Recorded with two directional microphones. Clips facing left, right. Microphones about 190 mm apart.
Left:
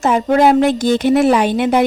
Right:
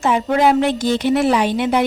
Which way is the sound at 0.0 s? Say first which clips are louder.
Left 3 dB; 45° left (ahead or behind).